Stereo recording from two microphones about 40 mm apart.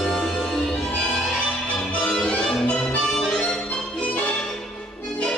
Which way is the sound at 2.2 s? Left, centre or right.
Left.